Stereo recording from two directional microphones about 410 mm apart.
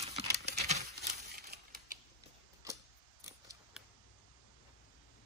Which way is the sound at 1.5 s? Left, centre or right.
Right.